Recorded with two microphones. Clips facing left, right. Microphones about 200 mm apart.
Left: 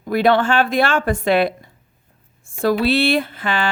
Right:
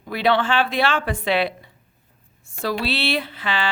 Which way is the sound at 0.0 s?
45° left (ahead or behind).